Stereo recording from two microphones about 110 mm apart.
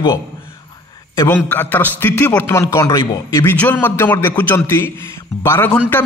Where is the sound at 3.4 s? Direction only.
15° left (ahead or behind).